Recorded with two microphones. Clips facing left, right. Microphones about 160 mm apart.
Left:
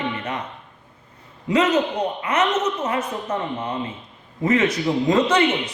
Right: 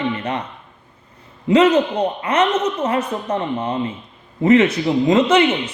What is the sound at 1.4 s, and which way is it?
A woman's voice, 30° right (ahead or behind).